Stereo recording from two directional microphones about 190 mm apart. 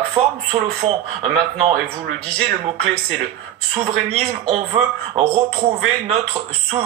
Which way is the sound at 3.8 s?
35° right (ahead or behind).